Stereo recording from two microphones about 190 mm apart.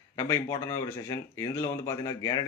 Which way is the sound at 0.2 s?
15° left (ahead or behind).